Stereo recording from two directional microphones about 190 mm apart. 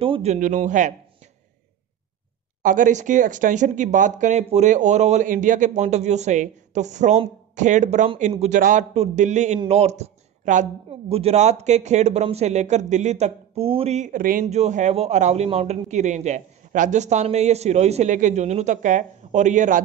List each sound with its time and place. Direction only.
0.0 s a woman's voice: 30° right (ahead or behind)
2.6 s a woman's voice: 45° right (ahead or behind)